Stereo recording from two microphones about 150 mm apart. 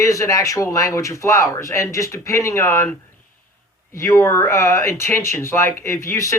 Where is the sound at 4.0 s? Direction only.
20° left (ahead or behind).